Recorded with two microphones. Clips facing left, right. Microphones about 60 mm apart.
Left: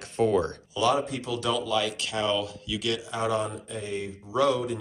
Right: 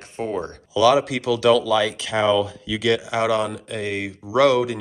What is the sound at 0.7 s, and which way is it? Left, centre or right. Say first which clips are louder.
Speech: right 9 dB; right.